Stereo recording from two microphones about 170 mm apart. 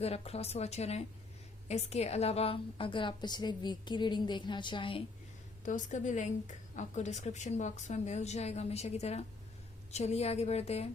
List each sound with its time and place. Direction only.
0.0 s a woman's voice: 35° left (ahead or behind)
5.6 s a woman's voice: 50° left (ahead or behind)